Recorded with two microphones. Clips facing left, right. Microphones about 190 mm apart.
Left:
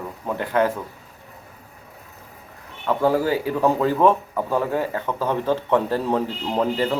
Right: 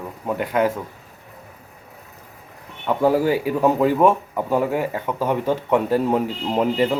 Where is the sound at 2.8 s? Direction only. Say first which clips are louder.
Right 2 dB; 20° right (ahead or behind).